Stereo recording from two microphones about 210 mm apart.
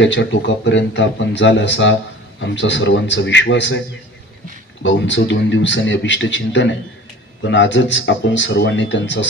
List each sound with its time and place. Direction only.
0.0 s speech: 60° left (ahead or behind)
4.8 s speech: 60° left (ahead or behind)